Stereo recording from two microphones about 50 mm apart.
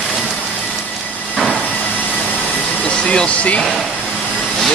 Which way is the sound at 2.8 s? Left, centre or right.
Centre.